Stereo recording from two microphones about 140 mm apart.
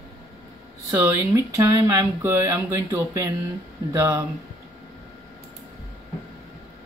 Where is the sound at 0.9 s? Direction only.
20° right (ahead or behind).